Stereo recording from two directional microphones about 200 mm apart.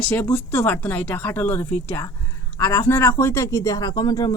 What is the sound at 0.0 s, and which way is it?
Speech, 5° left (ahead or behind).